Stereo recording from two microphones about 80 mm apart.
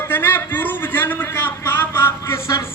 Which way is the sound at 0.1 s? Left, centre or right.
Left.